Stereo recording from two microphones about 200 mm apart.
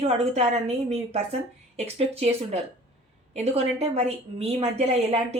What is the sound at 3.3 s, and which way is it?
A woman's voice, 30° right (ahead or behind).